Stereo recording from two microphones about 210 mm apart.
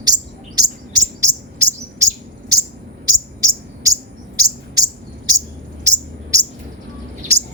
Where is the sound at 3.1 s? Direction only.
15° right (ahead or behind).